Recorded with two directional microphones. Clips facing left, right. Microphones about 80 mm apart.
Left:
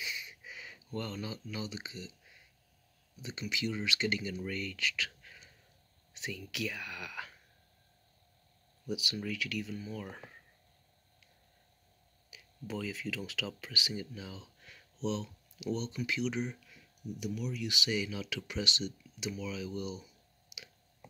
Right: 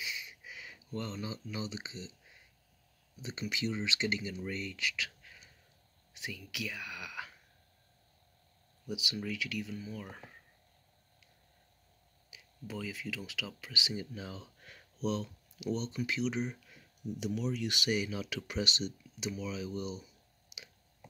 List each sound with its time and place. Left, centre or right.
0.0 s a sound: centre
0.9 s speech: centre
3.2 s speech: right; by 5.5 s centre
6.1 s a sound: centre
6.5 s speech: centre
8.8 s speech: centre
12.3 s speech: centre
14.1 s a sound: right
15.0 s speech: right
17.2 s speech: right
17.8 s speech: right